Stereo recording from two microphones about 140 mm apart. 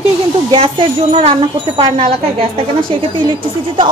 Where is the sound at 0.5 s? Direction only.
40° right (ahead or behind).